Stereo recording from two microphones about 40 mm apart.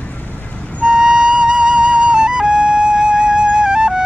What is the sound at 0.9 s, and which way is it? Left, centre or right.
Music, centre.